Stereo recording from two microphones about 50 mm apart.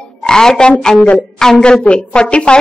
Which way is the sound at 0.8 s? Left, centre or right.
Centre.